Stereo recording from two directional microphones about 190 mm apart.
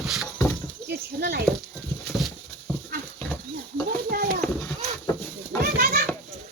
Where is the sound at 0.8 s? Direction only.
60° right (ahead or behind).